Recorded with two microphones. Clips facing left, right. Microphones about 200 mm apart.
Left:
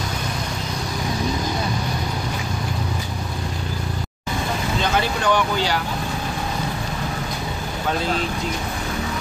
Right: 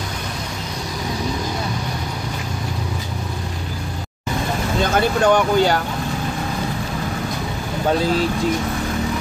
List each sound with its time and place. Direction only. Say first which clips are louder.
4.9 s speech: right 6 dB; 45° right (ahead or behind)